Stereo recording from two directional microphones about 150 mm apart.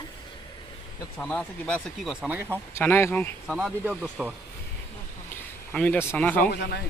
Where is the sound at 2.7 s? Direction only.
15° left (ahead or behind).